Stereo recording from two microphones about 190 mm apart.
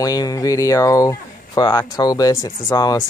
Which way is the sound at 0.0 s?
20° left (ahead or behind).